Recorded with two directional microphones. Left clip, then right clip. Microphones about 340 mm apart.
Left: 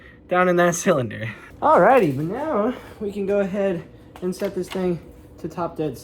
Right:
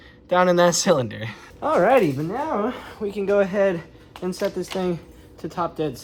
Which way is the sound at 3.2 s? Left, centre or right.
Centre.